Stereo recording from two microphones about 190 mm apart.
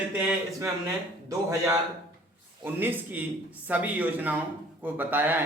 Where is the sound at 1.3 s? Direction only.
15° right (ahead or behind).